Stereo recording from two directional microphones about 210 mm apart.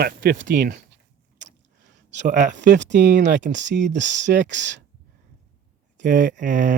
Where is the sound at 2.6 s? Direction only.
55° right (ahead or behind).